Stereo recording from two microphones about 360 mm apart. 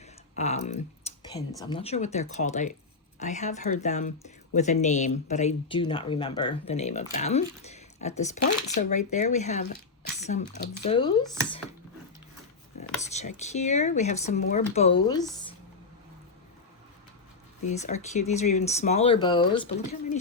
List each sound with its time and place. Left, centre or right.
0.0 s speech: centre
13.0 s speech: centre
17.7 s speech: centre